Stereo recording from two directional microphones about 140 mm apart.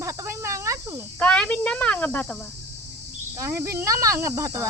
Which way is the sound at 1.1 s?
10° left (ahead or behind).